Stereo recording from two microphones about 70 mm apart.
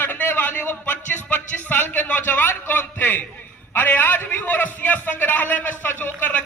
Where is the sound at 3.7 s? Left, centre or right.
Left.